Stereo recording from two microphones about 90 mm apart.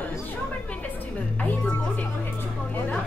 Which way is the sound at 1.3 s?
15° left (ahead or behind).